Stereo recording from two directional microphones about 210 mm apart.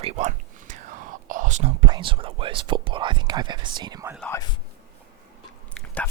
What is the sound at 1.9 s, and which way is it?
Speech, 25° right (ahead or behind).